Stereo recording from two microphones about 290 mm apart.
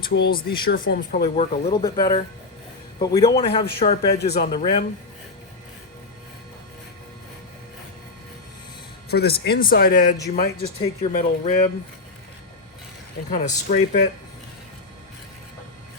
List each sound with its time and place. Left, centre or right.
0.1 s speech: left
1.4 s speech: centre
4.2 s speech: left
4.5 s speech: centre
9.0 s speech: left
13.3 s speech: left